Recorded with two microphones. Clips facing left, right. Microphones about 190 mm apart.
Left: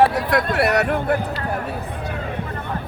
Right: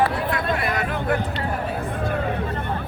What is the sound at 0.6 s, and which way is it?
Speech, 75° left (ahead or behind).